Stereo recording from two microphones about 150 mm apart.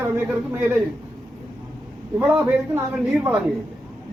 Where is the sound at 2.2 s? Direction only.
5° right (ahead or behind).